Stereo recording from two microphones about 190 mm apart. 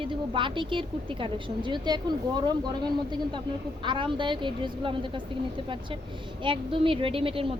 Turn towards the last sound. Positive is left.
turn(degrees=-30)  # may be behind; listen again after turning